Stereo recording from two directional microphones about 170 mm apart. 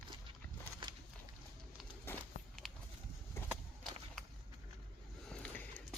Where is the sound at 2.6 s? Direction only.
Centre (ahead or behind).